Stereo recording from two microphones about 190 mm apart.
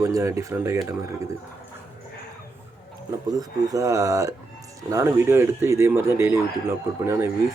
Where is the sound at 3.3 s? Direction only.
20° right (ahead or behind).